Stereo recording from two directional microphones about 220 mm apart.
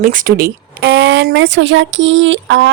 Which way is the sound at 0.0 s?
40° right (ahead or behind).